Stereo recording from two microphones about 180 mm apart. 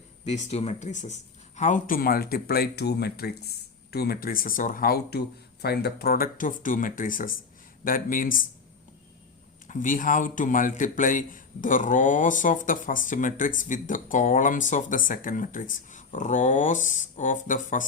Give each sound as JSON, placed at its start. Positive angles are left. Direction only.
{"t": 0.3, "sound": "a man's voice", "side_deg": 35}
{"t": 9.6, "sound": "a man's voice", "side_deg": 45}